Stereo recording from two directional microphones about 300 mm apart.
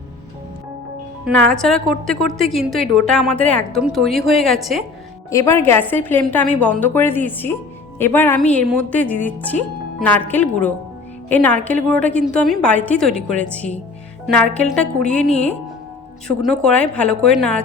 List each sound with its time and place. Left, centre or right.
1.2 s a woman's voice: centre
15.3 s speech: left
16.2 s speech: centre